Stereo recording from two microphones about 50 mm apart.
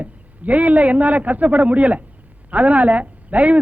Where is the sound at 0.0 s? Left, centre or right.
Right.